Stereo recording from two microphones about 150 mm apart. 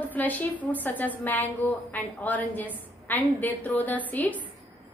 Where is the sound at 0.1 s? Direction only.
10° left (ahead or behind).